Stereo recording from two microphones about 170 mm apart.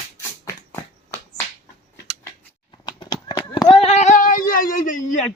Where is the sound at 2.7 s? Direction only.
25° left (ahead or behind); by 5.2 s 50° left (ahead or behind).